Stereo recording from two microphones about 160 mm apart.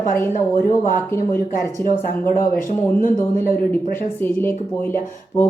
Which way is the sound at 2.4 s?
55° left (ahead or behind).